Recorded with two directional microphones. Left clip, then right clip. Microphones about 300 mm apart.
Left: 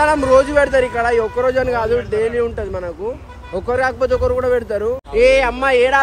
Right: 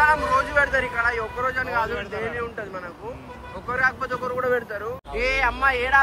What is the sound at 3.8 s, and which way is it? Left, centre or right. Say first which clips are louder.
A man's voice: left 6 dB; centre.